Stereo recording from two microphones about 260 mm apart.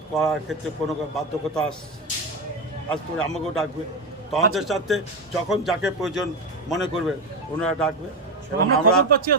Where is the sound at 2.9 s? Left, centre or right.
Centre.